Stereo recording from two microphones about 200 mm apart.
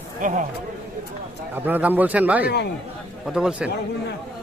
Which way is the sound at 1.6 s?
10° right (ahead or behind).